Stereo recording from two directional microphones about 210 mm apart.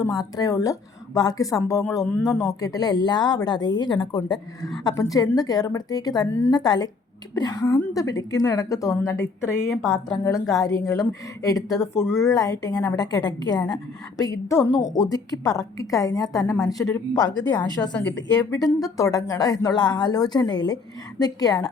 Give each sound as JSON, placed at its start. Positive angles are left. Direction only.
{"t": 0.0, "sound": "speech", "side_deg": 15}
{"t": 9.8, "sound": "a woman's voice", "side_deg": -5}
{"t": 10.2, "sound": "speech", "side_deg": 15}
{"t": 18.0, "sound": "a woman's voice", "side_deg": 60}
{"t": 18.5, "sound": "speech", "side_deg": 15}